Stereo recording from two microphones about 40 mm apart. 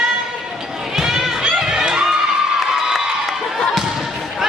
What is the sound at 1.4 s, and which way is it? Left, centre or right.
Crowd, centre.